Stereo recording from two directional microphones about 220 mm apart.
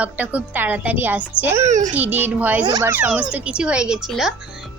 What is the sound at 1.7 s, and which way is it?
Speech, 35° right (ahead or behind).